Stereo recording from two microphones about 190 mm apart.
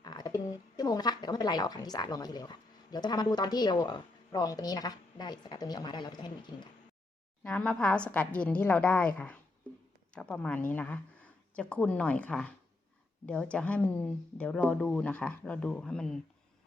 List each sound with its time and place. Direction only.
0.0 s a woman's voice: 20° left (ahead or behind)
7.4 s a woman's voice: 5° left (ahead or behind)